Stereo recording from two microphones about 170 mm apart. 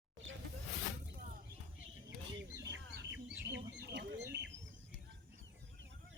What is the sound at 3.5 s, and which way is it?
Chicken, 90° right.